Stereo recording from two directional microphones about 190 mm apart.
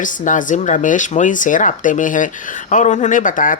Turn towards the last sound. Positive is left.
turn(degrees=45)  # may be behind; listen again after turning